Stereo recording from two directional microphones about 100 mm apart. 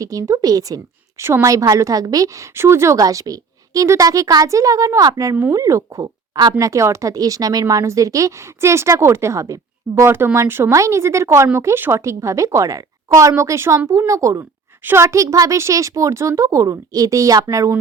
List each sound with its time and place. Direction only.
0.0 s speech: 35° right (ahead or behind)
1.2 s speech: 25° right (ahead or behind)